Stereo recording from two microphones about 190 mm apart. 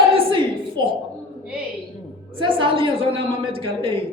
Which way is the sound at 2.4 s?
25° right (ahead or behind).